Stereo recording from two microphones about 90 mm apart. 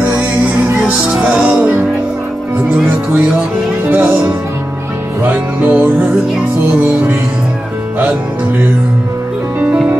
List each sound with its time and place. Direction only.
0.8 s music: 15° right (ahead or behind)
3.8 s speech: 15° right (ahead or behind)
5.2 s music: 20° right (ahead or behind)
9.6 s music: 15° right (ahead or behind)